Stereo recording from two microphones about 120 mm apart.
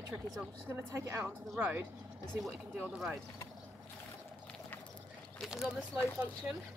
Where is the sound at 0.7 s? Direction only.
20° right (ahead or behind).